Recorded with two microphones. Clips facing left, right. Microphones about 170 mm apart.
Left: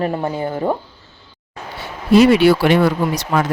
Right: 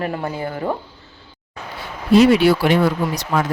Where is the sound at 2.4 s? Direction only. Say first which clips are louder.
Left 2 dB; 75° left (ahead or behind).